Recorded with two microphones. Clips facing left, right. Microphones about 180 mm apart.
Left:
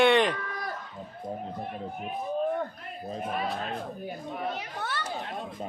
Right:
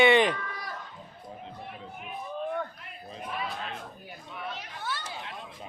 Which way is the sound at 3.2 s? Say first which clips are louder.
Left 3 dB; 45° left (ahead or behind).